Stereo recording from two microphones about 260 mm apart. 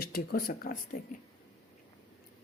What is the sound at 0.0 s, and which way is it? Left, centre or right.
Speech, left.